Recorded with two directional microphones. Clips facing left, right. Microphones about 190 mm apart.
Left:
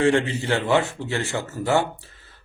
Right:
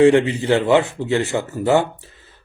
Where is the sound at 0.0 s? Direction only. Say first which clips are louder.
Right 7 dB; 15° right (ahead or behind).